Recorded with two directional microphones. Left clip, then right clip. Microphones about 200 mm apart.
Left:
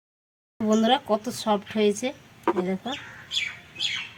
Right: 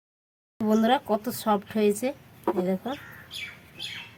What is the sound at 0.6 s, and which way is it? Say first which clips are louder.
Speech: left 1 dB; centre (ahead or behind).